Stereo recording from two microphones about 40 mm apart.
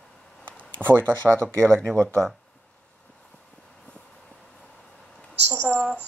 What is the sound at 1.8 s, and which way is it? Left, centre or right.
Speech, left.